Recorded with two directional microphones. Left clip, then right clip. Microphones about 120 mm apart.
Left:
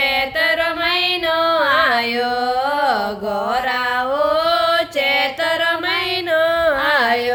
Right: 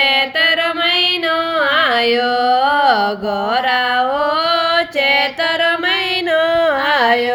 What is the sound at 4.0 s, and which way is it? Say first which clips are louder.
Music: right 2 dB; 40° right (ahead or behind).